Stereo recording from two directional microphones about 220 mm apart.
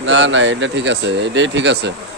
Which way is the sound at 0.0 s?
55° right (ahead or behind).